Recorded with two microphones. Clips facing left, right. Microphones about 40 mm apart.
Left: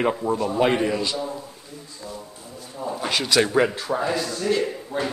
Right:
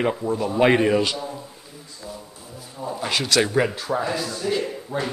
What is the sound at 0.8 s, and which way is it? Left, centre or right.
Speech, right.